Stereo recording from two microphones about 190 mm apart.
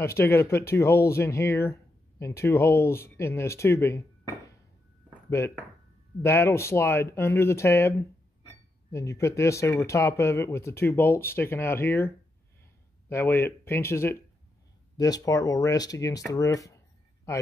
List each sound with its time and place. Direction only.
0.0 s speech: 15° left (ahead or behind)
6.2 s speech: 15° left (ahead or behind)
8.9 s speech: 15° left (ahead or behind)
13.1 s speech: 15° left (ahead or behind)
16.3 s a sound: 15° left (ahead or behind)